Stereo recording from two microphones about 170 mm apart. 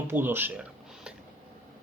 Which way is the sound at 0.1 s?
15° right (ahead or behind).